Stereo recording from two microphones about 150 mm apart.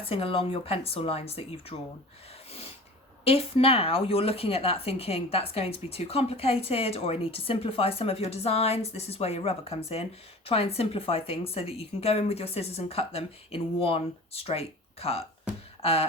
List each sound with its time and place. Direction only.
0.0 s speech: 35° left (ahead or behind)
2.5 s snort: 40° left (ahead or behind)
3.2 s speech: 40° left (ahead or behind)